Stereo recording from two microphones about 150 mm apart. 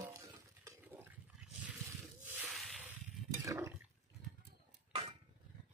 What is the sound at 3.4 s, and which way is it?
Toilet flush, 20° right (ahead or behind).